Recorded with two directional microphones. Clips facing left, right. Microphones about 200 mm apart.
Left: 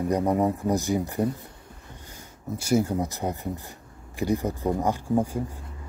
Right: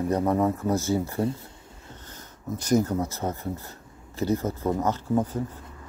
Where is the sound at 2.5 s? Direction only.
10° left (ahead or behind).